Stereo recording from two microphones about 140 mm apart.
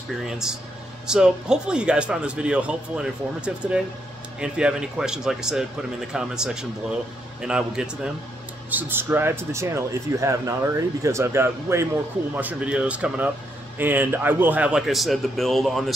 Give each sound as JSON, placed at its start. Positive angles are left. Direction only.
{"t": 0.2, "sound": "a man's voice", "side_deg": -5}